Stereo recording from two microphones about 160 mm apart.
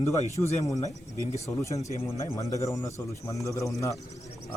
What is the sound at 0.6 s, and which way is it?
Speech, 20° left (ahead or behind).